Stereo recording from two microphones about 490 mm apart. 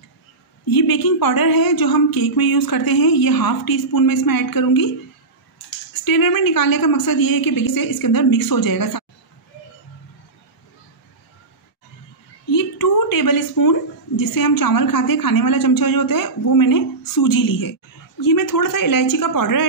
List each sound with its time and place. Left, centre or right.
0.7 s speech: left
6.0 s speech: left
12.4 s a woman's voice: left